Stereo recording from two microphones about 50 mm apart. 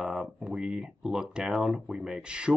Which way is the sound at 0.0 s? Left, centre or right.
Centre.